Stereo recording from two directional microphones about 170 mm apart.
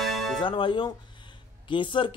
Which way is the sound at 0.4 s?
30° left (ahead or behind).